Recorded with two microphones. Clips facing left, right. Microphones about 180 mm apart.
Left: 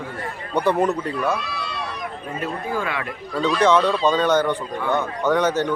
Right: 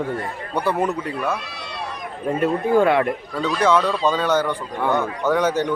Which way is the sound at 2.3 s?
60° right (ahead or behind).